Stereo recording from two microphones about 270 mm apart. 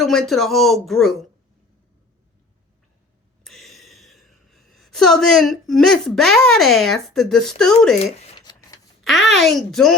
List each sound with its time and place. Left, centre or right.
0.0 s speech: centre
3.4 s speech: centre
8.2 s a sound: centre
9.0 s speech: centre